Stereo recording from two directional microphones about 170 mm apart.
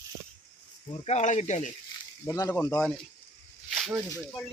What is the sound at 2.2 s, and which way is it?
Speech, 15° left (ahead or behind).